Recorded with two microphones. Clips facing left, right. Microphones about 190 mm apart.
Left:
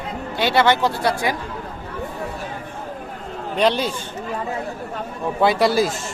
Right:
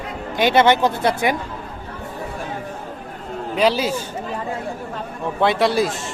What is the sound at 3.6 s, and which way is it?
Speech, 5° right (ahead or behind).